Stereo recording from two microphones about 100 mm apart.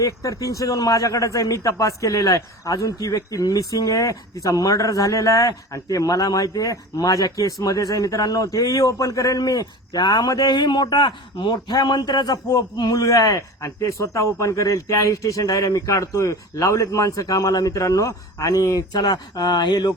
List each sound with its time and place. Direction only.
0.0 s a man's voice: 35° left (ahead or behind)